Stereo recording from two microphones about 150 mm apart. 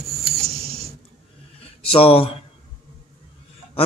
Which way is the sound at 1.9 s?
40° left (ahead or behind).